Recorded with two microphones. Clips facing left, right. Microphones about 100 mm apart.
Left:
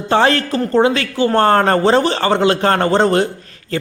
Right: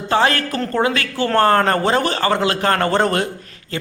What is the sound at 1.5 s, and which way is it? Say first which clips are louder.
A man's voice: left 3 dB; 30° left (ahead or behind).